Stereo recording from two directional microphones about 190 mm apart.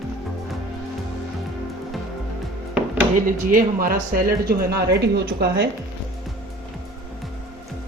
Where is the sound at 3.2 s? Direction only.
45° right (ahead or behind).